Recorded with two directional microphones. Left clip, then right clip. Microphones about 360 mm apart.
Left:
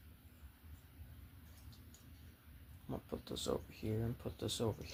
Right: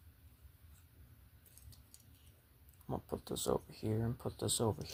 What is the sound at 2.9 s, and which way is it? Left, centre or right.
Speech, right.